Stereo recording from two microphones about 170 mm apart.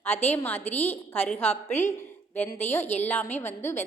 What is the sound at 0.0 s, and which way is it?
A woman's voice, 10° left (ahead or behind).